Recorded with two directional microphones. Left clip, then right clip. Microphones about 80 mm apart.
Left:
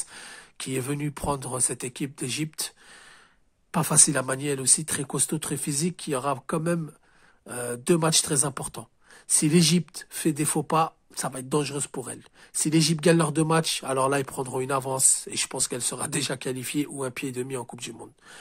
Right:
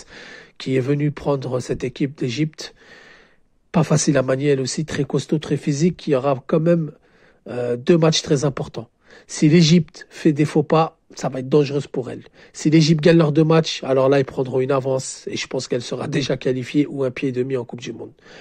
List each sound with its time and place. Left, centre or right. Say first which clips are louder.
0.0 s speech: right 3 dB; right
2.4 s a sound: right 7 dB; right
3.7 s speech: right 6 dB; right
14.2 s speech: right 9 dB; right